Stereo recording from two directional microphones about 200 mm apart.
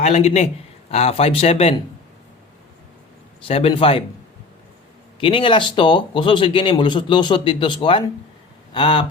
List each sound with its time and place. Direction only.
0.0 s a man's voice: 35° left (ahead or behind)
3.4 s speech: 30° left (ahead or behind)
5.2 s speech: 25° left (ahead or behind)